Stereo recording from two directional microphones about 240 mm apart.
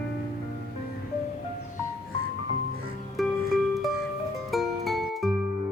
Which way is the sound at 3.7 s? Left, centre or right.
Centre.